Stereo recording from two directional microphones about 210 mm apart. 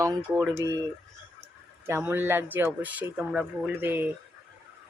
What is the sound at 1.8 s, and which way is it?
Speech, 10° right (ahead or behind).